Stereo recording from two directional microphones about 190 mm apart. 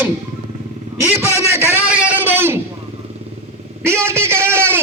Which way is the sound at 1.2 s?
15° right (ahead or behind).